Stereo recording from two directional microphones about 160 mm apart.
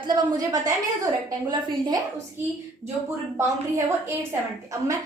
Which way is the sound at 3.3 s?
20° right (ahead or behind).